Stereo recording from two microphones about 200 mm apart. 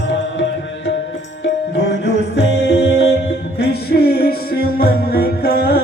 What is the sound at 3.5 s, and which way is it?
Music, 50° left (ahead or behind).